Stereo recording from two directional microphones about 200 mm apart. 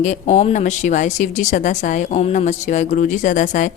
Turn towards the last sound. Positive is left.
turn(degrees=40)  # may be behind; listen again after turning